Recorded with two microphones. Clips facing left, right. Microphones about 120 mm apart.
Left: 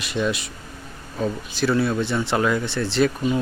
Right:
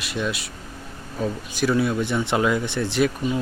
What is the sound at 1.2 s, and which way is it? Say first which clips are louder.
Speech: left 1 dB; 10° right (ahead or behind).